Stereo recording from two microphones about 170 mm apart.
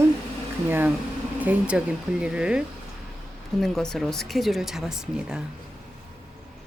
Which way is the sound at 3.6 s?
Centre (ahead or behind).